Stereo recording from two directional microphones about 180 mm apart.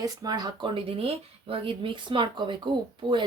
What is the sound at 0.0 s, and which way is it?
Speech, 20° right (ahead or behind).